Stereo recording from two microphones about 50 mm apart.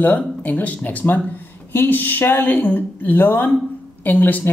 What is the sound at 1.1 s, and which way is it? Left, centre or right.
Speech, left.